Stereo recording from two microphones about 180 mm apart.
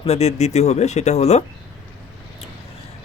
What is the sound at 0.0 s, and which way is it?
Speech, 35° left (ahead or behind).